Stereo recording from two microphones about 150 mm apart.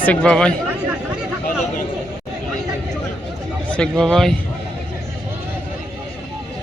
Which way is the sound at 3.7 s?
5° left (ahead or behind).